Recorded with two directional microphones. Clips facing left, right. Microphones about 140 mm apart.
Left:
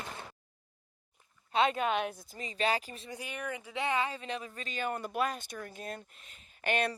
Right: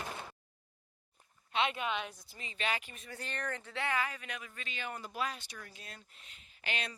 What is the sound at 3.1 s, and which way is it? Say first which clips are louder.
Speech: left 1 dB; 10° left (ahead or behind).